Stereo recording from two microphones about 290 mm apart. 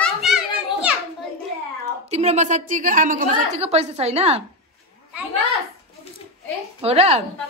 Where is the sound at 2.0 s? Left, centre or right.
Right.